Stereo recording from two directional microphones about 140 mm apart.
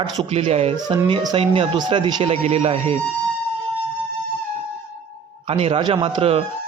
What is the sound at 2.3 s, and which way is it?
Speech, 45° right (ahead or behind).